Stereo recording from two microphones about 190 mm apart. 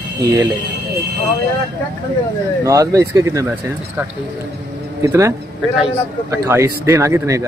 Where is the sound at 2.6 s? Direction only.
15° right (ahead or behind).